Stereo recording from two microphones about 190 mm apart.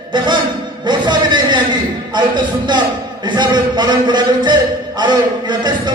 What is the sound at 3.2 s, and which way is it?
A man's voice, 25° right (ahead or behind).